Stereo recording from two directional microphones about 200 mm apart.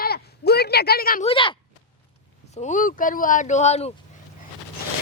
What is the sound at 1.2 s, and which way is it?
Speech, 25° left (ahead or behind).